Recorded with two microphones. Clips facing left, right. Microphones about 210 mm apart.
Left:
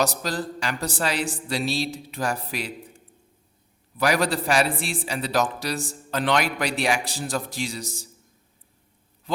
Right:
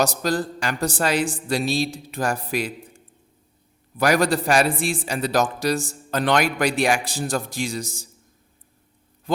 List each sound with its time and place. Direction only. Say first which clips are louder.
0.0 s a man's voice: right 4 dB; 45° right (ahead or behind)
3.9 s a man's voice: right 3 dB; 45° right (ahead or behind)